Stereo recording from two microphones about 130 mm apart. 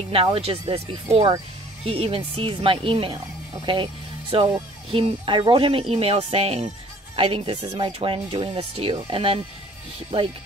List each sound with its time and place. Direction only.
0.1 s speech: 50° right (ahead or behind)